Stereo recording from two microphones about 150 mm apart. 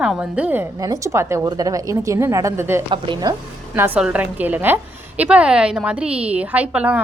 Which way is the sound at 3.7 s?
10° right (ahead or behind).